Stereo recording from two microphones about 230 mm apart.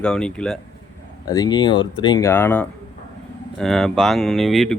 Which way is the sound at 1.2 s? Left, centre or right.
Centre.